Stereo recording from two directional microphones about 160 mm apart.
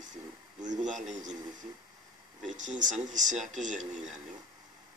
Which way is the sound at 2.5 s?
50° right (ahead or behind).